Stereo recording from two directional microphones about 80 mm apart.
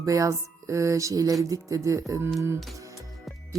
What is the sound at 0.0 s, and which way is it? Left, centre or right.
Speech, right.